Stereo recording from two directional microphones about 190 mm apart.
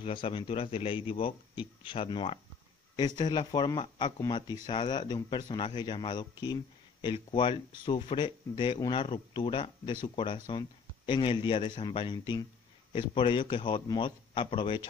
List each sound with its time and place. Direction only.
0.0 s speech: 30° left (ahead or behind)